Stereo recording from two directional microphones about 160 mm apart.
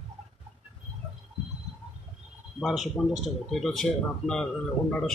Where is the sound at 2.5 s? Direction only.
Centre (ahead or behind).